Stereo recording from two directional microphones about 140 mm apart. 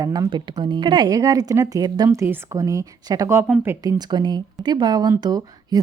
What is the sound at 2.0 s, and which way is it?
Speech, 15° right (ahead or behind).